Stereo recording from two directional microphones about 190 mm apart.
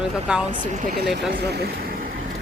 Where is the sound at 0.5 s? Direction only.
40° right (ahead or behind).